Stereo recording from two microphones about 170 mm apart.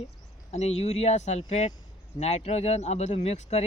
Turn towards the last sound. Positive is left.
turn(degrees=40)  # may be behind; listen again after turning